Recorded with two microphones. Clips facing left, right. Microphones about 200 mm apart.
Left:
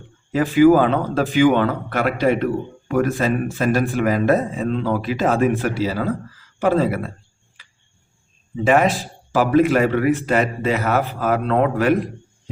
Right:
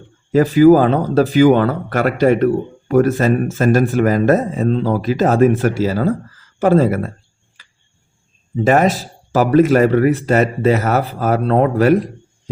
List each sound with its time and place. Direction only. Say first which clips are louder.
0.3 s a man's voice: right 4 dB; 40° right (ahead or behind)
8.6 s a man's voice: right 3 dB; 40° right (ahead or behind)